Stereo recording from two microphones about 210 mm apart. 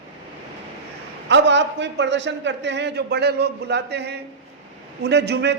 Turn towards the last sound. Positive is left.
turn(degrees=-55)  # may be behind; listen again after turning